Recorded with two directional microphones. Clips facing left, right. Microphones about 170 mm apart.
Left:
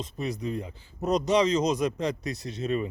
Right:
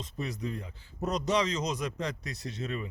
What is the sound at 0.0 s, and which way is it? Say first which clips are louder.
Speech: left 4 dB; 20° left (ahead or behind).